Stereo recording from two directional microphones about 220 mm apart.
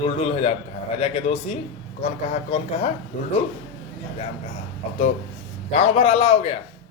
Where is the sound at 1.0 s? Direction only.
25° left (ahead or behind).